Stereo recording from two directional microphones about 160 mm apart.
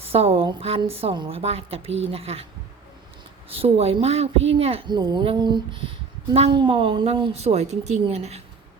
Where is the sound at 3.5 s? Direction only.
40° right (ahead or behind).